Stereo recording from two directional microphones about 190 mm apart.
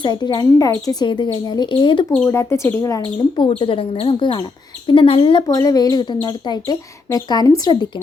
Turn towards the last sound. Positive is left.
turn(degrees=20)  # may be behind; listen again after turning